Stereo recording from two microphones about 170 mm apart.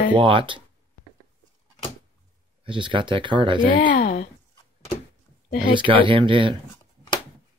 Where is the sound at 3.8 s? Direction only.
50° left (ahead or behind).